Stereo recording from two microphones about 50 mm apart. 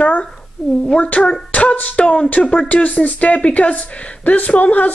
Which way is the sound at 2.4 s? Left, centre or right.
Centre.